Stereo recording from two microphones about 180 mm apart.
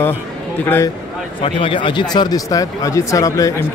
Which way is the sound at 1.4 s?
30° left (ahead or behind).